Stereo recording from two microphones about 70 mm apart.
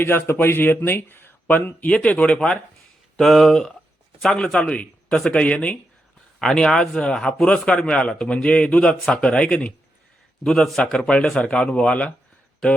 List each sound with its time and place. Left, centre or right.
0.0 s a man's voice: left
3.2 s a man's voice: centre